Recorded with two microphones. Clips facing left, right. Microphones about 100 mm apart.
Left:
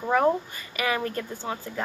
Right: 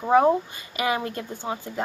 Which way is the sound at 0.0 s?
20° right (ahead or behind).